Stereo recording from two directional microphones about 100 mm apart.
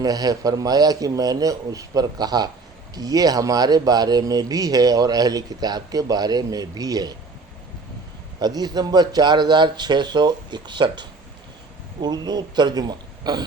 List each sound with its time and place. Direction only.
0.0 s speech: 40° right (ahead or behind)
8.4 s a man's voice: 45° right (ahead or behind)
12.0 s a man's voice: 45° right (ahead or behind)